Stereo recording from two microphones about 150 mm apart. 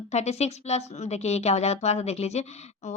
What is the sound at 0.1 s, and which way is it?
A woman's voice, 45° left (ahead or behind).